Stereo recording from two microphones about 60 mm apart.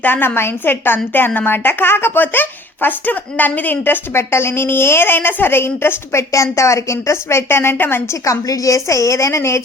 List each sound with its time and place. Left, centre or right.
0.0 s a woman's voice: left
4.1 s a woman's voice: left
6.3 s a woman's voice: left
8.2 s a woman's voice: left